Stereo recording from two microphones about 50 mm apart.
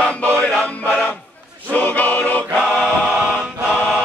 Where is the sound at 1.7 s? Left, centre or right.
Left.